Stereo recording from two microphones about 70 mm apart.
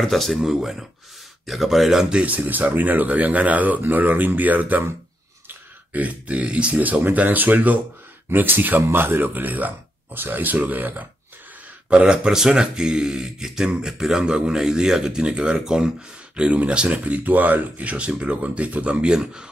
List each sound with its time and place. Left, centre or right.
0.0 s speech: centre; by 4.8 s right
5.9 s speech: right
11.9 s speech: centre